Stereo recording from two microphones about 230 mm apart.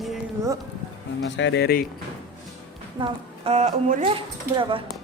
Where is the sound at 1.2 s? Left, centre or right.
Left.